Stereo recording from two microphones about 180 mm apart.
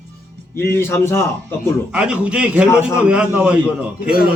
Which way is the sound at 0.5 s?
15° left (ahead or behind).